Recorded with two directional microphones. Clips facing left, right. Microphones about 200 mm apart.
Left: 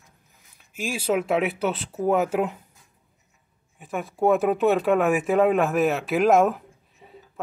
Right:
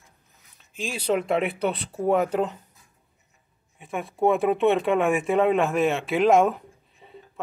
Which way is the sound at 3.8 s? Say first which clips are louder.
Even; centre (ahead or behind).